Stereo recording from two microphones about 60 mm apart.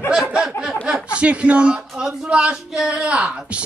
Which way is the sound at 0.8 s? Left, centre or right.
Centre.